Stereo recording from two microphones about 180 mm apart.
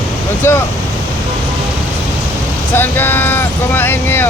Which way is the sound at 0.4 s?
15° left (ahead or behind).